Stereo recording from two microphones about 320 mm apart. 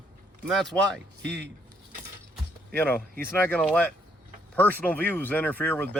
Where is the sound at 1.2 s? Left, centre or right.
Right.